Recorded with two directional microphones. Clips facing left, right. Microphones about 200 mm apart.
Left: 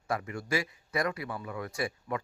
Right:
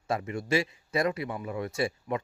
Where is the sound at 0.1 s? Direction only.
25° right (ahead or behind).